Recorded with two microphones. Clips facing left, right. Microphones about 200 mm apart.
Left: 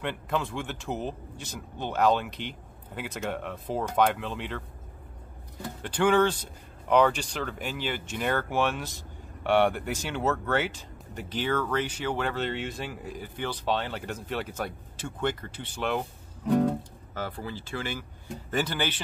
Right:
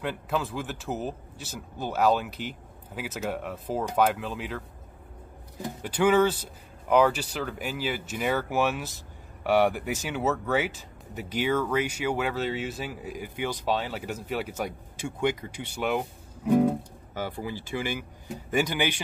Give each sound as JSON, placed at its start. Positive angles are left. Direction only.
{"t": 0.0, "sound": "speech", "side_deg": -5}
{"t": 5.8, "sound": "speech", "side_deg": -5}